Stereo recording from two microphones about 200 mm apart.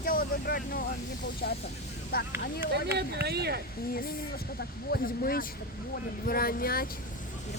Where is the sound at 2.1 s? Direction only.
50° left (ahead or behind).